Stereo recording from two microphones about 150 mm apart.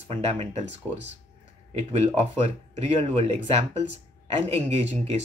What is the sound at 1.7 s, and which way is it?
Speech, 45° right (ahead or behind).